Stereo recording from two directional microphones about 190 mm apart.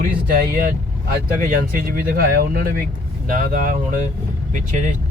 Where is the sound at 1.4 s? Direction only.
50° right (ahead or behind).